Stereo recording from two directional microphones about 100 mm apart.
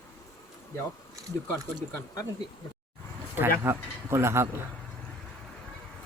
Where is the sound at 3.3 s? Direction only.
25° right (ahead or behind).